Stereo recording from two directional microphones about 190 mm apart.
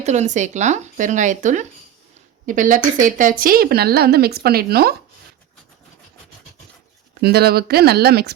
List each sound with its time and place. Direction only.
0.0 s a woman's voice: 35° right (ahead or behind); by 4.9 s 55° right (ahead or behind)
7.2 s a woman's voice: 55° right (ahead or behind)